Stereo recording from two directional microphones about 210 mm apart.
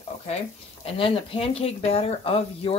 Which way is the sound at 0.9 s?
25° left (ahead or behind).